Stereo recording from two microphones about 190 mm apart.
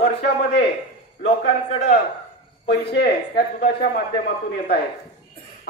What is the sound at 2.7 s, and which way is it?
A man's voice, 60° left (ahead or behind).